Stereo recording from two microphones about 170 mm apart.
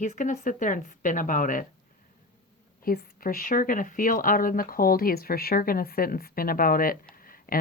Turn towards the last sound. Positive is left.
turn(degrees=55)  # may be behind; listen again after turning